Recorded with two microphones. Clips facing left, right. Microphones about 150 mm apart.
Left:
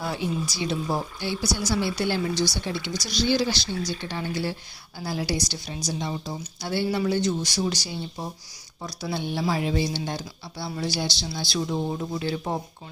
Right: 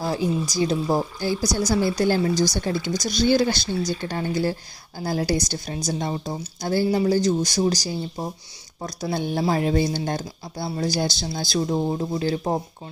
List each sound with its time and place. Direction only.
0.0 s speech: 40° right (ahead or behind)
11.9 s speech: 30° right (ahead or behind)